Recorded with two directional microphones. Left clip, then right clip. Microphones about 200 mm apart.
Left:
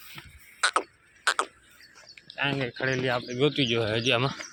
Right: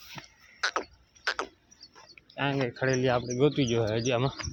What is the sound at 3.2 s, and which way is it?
Speech, 10° right (ahead or behind).